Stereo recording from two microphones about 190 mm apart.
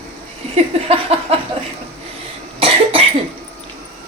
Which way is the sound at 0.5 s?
35° right (ahead or behind).